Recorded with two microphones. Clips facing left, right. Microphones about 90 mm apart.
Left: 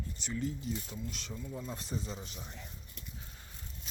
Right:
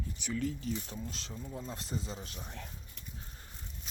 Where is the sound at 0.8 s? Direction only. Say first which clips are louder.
Even; 35° right (ahead or behind).